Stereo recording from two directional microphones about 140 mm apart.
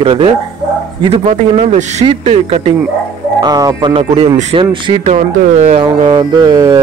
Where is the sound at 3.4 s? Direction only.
30° right (ahead or behind).